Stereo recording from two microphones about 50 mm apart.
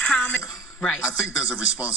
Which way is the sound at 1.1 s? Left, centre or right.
Centre.